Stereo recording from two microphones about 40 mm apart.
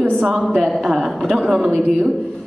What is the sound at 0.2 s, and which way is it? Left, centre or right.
A woman's voice, centre.